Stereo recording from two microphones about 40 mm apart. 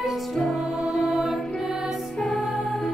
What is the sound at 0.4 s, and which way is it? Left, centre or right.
Music, centre.